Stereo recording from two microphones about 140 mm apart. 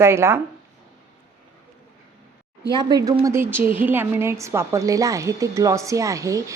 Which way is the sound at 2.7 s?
30° right (ahead or behind).